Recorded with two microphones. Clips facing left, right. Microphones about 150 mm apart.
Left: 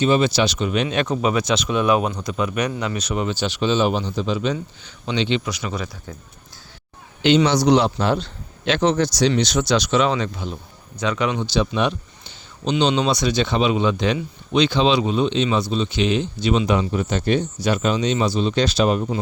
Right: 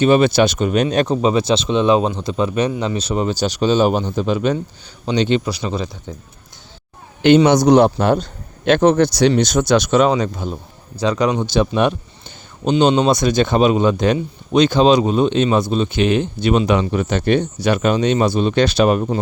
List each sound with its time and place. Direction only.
0.0 s speech: 55° right (ahead or behind); by 5.9 s 30° right (ahead or behind)
7.2 s speech: 55° right (ahead or behind)
9.3 s speech: 45° right (ahead or behind)